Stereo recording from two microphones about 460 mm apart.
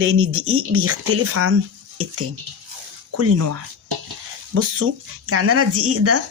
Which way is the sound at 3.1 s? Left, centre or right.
Right.